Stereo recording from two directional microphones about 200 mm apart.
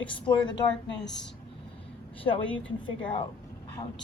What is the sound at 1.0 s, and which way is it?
Speech, 60° left (ahead or behind).